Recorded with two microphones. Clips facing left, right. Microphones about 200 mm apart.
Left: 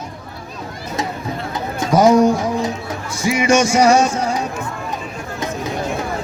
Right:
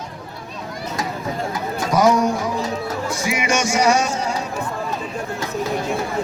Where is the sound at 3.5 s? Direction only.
30° left (ahead or behind).